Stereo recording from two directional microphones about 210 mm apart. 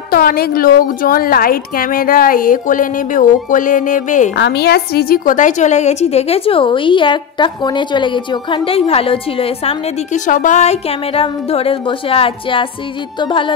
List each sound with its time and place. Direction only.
0.1 s a woman's voice: 45° left (ahead or behind)
4.4 s a woman's voice: 50° left (ahead or behind); by 13.6 s 20° left (ahead or behind)